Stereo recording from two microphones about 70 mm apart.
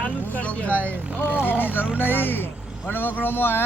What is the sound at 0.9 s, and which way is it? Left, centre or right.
Speech, right.